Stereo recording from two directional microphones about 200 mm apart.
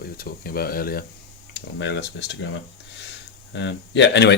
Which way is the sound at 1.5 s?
60° left (ahead or behind).